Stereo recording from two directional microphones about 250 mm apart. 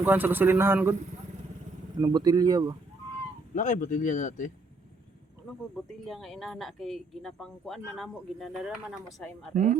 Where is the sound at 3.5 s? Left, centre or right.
Left.